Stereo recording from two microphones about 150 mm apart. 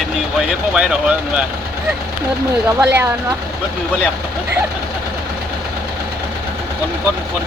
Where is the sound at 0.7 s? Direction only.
5° right (ahead or behind).